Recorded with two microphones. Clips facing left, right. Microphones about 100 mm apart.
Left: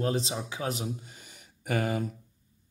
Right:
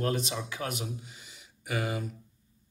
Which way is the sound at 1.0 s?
50° left (ahead or behind).